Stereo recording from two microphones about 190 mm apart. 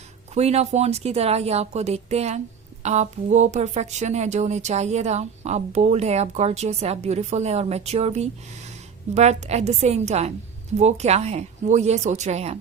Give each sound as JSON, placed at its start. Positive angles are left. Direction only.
{"t": 0.3, "sound": "speech", "side_deg": -35}